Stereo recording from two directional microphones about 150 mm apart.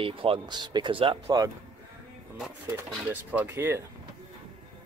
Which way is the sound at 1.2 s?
25° right (ahead or behind).